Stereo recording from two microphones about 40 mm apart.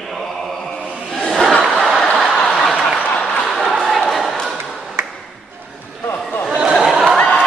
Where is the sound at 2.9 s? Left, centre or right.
Left.